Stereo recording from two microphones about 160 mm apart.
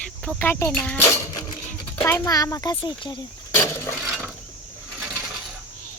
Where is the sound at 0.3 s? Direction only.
15° left (ahead or behind); by 3.2 s 30° left (ahead or behind).